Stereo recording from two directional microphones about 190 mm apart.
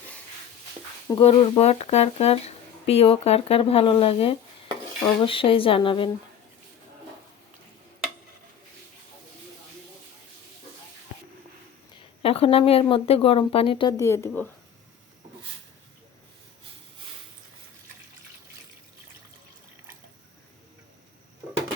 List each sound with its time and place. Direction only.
1.2 s speech: 30° left (ahead or behind)
12.2 s speech: 30° left (ahead or behind); by 14.4 s 15° left (ahead or behind)